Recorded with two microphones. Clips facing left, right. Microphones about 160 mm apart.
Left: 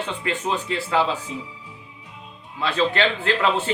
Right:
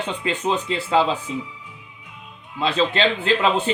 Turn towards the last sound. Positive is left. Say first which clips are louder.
# right 2 dB
turn(degrees=-20)  # may be behind; listen again after turning